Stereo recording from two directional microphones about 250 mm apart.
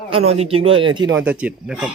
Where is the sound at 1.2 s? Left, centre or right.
Centre.